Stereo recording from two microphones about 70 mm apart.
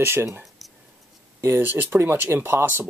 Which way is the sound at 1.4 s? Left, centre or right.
Right.